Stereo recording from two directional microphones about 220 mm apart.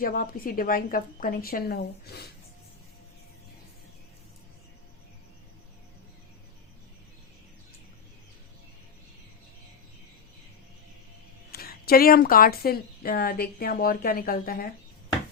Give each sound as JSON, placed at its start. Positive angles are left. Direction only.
{"t": 0.0, "sound": "a woman's voice", "side_deg": 40}
{"t": 11.5, "sound": "a woman's voice", "side_deg": 45}